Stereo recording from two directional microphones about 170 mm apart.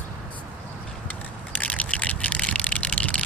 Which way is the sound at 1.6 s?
10° left (ahead or behind).